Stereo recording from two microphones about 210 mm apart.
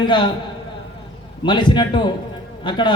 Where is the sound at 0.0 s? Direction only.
20° left (ahead or behind).